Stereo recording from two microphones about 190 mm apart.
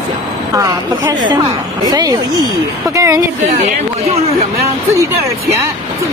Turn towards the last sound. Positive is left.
turn(degrees=-30)  # may be behind; listen again after turning